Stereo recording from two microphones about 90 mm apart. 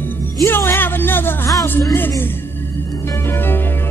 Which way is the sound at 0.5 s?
25° left (ahead or behind).